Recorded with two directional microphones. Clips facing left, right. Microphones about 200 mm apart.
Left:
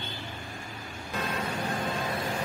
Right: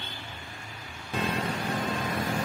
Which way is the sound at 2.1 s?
40° right (ahead or behind).